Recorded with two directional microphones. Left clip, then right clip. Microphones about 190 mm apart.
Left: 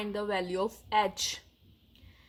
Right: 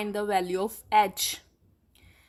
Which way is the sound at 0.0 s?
35° right (ahead or behind).